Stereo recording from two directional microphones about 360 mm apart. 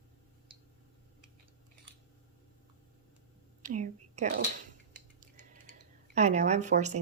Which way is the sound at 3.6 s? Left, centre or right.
Right.